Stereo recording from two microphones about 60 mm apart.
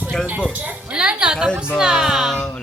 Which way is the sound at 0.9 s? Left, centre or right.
Centre.